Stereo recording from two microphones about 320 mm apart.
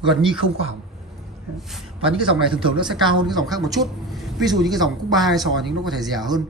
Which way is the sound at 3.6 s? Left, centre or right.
Centre.